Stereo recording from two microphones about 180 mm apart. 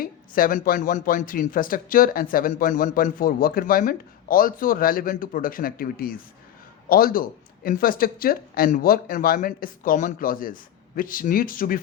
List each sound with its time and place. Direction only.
0.0 s speech: 55° left (ahead or behind)